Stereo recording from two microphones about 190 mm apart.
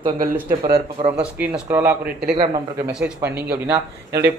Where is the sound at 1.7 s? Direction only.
10° right (ahead or behind).